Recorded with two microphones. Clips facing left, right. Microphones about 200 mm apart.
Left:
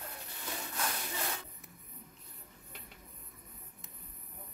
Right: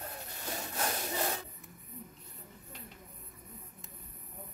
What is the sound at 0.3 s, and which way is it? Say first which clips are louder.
Wood: right 2 dB; 40° right (ahead or behind).